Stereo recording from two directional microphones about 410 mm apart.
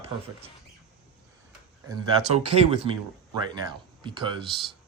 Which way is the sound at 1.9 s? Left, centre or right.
Centre.